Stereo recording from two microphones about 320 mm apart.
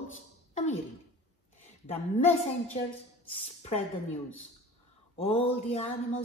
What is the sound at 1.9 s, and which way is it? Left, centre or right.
Speech, centre.